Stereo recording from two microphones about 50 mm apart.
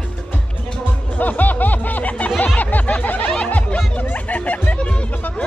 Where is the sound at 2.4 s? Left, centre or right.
Left.